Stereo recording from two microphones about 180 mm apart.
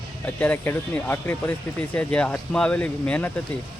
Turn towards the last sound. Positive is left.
turn(degrees=10)  # may be behind; listen again after turning